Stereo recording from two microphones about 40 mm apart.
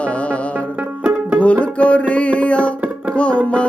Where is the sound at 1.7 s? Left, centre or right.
Left.